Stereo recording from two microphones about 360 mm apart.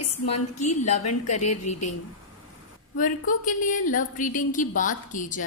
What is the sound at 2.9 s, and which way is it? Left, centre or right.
Speech, left.